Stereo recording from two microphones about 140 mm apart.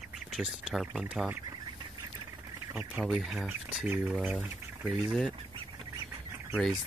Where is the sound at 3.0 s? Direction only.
Centre (ahead or behind).